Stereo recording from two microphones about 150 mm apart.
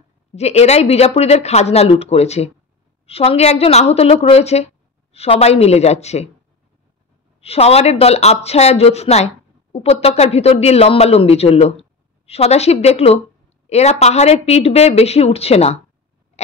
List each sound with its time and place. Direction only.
0.3 s speech: 45° left (ahead or behind)
7.3 s speech: 40° left (ahead or behind)